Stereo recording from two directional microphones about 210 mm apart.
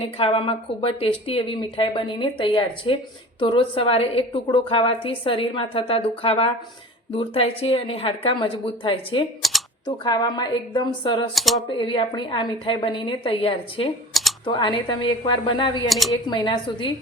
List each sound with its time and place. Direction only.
0.0 s speech: 25° left (ahead or behind)
9.4 s typing: centre (ahead or behind)
9.8 s speech: 20° left (ahead or behind)
11.3 s speech: centre (ahead or behind)
11.8 s speech: 25° left (ahead or behind)
14.1 s a sound: centre (ahead or behind)
14.4 s speech: 20° left (ahead or behind)
15.9 s speech: centre (ahead or behind)
16.2 s speech: 20° left (ahead or behind)